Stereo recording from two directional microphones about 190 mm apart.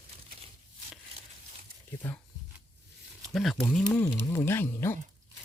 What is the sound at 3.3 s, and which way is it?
Speech, centre (ahead or behind).